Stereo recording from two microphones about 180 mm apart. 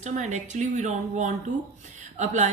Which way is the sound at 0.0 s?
40° right (ahead or behind).